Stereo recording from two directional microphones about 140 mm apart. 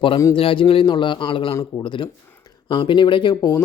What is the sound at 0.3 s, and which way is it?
Speech, 40° left (ahead or behind).